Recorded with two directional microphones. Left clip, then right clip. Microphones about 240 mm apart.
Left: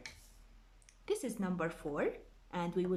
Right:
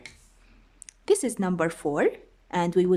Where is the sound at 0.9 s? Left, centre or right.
Right.